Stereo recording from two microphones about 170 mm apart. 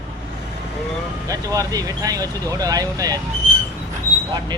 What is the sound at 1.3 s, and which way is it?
Speech, 20° right (ahead or behind).